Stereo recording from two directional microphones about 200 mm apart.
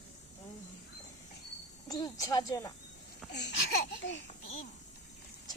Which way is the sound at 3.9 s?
65° left (ahead or behind).